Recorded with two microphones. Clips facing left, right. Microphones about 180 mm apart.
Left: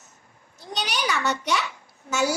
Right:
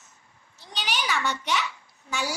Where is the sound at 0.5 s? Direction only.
50° left (ahead or behind).